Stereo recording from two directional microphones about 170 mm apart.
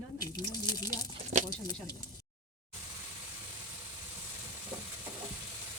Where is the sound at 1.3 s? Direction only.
40° right (ahead or behind).